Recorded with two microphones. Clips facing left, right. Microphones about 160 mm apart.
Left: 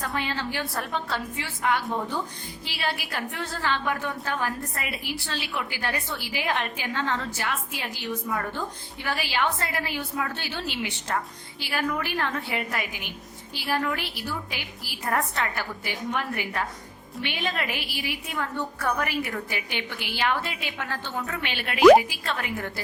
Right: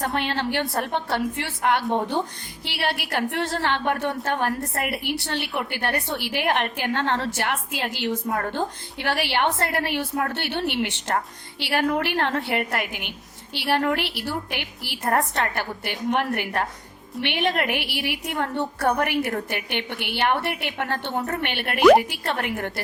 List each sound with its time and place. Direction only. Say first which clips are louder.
0.0 s a woman's voice: right 5 dB; 70° right (ahead or behind)
21.2 s a woman's voice: right 4 dB; 40° right (ahead or behind)
21.4 s a woman's voice: left 1 dB; 55° right (ahead or behind)